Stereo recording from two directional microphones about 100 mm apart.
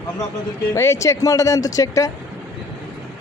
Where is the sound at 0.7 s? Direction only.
30° left (ahead or behind).